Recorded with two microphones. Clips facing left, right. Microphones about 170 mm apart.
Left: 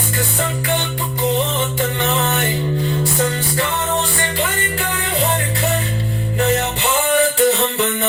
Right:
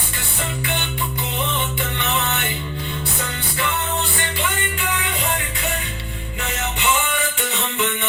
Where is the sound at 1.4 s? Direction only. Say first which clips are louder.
Left 5 dB; 35° left (ahead or behind).